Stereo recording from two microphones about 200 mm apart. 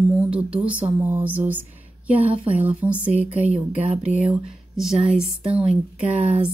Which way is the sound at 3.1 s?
35° right (ahead or behind).